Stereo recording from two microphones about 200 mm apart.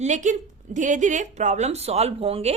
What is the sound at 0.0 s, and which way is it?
A woman's voice, 40° right (ahead or behind).